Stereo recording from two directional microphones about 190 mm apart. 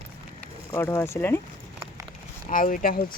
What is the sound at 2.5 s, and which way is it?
Speech, 45° left (ahead or behind).